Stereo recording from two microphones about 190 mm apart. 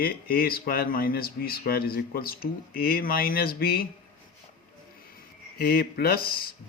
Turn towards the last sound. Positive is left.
turn(degrees=55)  # may be behind; listen again after turning